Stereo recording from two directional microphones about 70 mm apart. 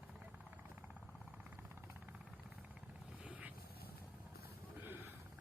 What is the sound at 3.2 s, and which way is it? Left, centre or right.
Vehicle, centre.